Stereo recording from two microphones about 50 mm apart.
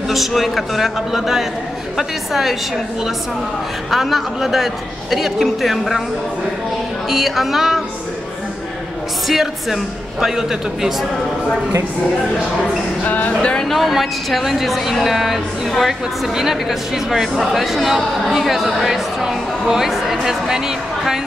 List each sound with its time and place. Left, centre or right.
0.1 s a woman's voice: centre
3.9 s a woman's voice: centre
7.1 s a woman's voice: centre
9.3 s a woman's voice: centre
13.0 s music: left
13.4 s speech: centre
13.7 s a woman's voice: centre